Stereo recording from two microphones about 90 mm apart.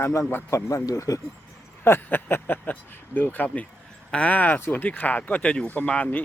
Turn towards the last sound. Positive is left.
turn(degrees=15)  # may be behind; listen again after turning